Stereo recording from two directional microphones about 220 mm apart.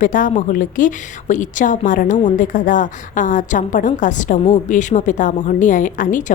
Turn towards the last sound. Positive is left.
turn(degrees=35)  # may be behind; listen again after turning